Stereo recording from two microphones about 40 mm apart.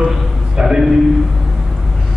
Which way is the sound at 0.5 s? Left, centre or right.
Centre.